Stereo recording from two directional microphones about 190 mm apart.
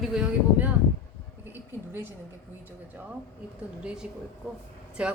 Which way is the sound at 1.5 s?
10° right (ahead or behind).